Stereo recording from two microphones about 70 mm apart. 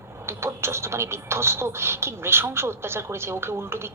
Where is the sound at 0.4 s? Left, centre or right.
Right.